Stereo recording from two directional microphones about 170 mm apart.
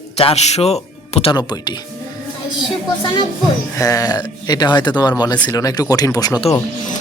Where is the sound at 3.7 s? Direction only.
20° left (ahead or behind).